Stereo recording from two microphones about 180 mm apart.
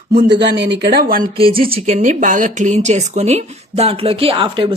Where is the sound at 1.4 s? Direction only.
30° right (ahead or behind).